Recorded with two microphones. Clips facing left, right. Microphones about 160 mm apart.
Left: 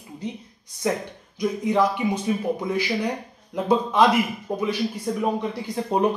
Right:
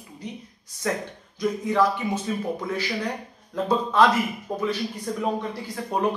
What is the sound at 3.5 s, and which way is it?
Speech, 15° left (ahead or behind).